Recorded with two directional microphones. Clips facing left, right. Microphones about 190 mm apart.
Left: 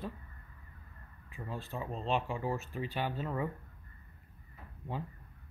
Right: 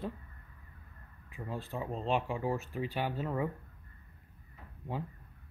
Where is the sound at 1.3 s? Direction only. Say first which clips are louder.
Right 2 dB; 15° right (ahead or behind).